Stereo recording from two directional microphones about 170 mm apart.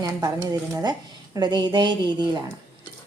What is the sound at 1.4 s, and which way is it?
Speech, 25° right (ahead or behind).